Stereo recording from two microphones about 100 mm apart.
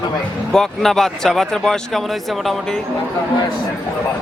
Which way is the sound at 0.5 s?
5° left (ahead or behind).